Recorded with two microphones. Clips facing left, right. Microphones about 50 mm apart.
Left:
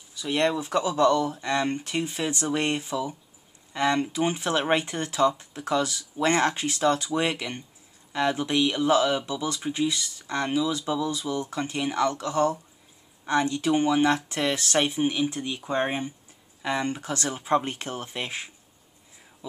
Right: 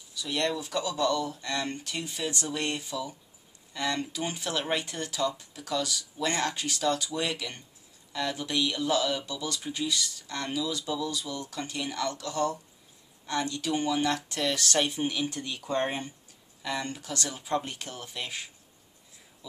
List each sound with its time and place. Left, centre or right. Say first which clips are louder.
0.1 s speech: left 5 dB; left